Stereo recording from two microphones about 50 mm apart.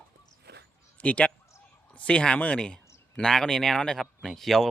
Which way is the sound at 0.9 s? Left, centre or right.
Left.